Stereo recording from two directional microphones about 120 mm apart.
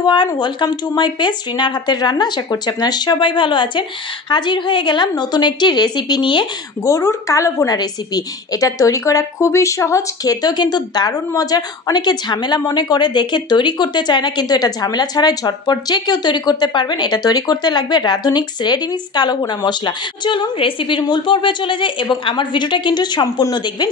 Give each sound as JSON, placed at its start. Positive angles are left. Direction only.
{"t": 0.0, "sound": "a woman's voice", "side_deg": 40}
{"t": 6.8, "sound": "a woman's voice", "side_deg": 25}